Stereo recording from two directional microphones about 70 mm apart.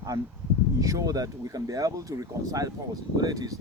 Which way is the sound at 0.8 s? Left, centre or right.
Right.